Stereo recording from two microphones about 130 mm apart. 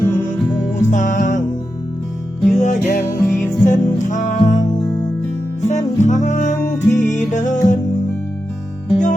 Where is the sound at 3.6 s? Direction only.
75° left (ahead or behind).